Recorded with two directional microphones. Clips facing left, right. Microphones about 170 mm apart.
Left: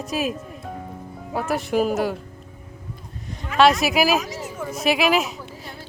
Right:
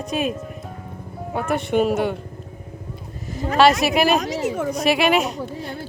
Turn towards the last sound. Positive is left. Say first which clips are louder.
# right 7 dB
turn(degrees=0)  # may be behind; listen again after turning